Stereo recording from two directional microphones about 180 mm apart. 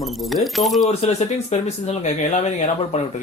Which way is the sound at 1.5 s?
40° left (ahead or behind).